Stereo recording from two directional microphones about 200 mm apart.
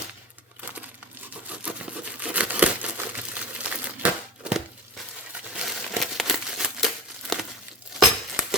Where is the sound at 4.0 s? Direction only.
5° right (ahead or behind).